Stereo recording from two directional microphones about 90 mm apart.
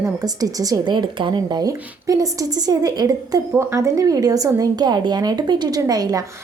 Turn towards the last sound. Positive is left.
turn(degrees=-45)  # may be behind; listen again after turning